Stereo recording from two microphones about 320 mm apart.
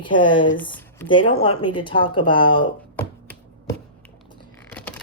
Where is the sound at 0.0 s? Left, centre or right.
Centre.